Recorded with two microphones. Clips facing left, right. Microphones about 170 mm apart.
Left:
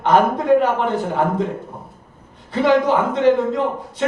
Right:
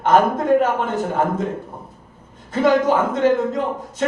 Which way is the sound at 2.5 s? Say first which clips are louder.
Even; 45° right (ahead or behind).